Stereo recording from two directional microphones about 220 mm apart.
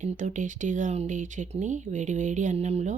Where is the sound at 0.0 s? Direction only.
35° right (ahead or behind).